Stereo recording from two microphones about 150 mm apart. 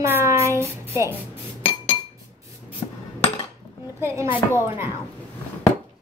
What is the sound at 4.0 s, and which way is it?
Speech, 15° right (ahead or behind).